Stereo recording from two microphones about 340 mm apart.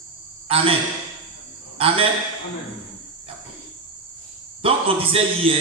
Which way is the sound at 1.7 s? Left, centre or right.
Centre.